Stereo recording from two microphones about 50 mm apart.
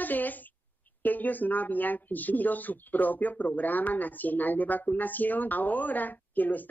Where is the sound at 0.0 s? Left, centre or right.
Left.